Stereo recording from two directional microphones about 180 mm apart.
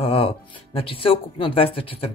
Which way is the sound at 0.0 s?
30° left (ahead or behind).